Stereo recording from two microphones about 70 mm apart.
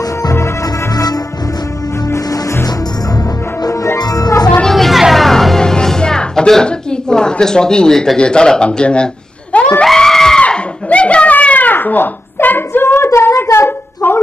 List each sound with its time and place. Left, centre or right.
0.9 s music: left
3.6 s music: left
4.0 s music: left
4.6 s music: centre
9.8 s screaming: centre
10.4 s a sound: centre; by 14.2 s left